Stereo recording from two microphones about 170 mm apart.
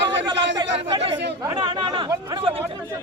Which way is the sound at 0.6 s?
30° right (ahead or behind).